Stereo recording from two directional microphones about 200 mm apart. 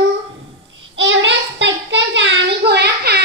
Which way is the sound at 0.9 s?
70° right (ahead or behind).